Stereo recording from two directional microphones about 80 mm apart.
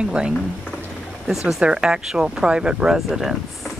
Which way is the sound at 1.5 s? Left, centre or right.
Centre.